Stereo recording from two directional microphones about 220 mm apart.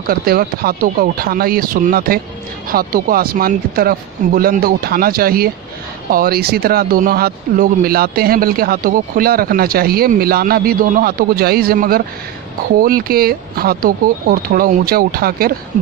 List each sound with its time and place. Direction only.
0.0 s speech: 40° right (ahead or behind)